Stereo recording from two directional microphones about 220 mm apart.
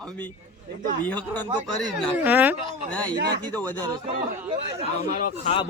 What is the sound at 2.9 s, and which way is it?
Speech, 5° left (ahead or behind).